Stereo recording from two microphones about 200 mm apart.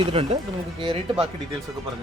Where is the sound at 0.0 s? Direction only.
30° right (ahead or behind).